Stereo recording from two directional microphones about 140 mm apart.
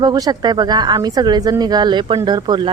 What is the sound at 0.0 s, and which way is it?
Speech, 30° right (ahead or behind).